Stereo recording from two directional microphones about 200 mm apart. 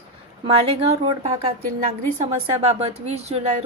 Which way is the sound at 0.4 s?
25° right (ahead or behind).